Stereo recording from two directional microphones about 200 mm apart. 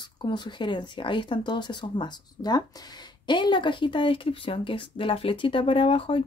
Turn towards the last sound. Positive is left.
turn(degrees=25)  # may be behind; listen again after turning